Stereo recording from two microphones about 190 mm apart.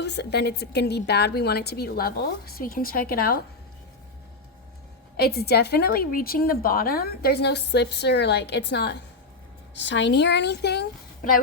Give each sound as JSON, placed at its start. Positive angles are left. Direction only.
{"t": 0.0, "sound": "a woman's voice", "side_deg": 60}
{"t": 5.1, "sound": "a woman's voice", "side_deg": 55}